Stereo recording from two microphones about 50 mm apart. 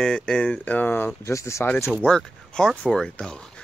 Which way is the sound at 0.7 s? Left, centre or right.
Left.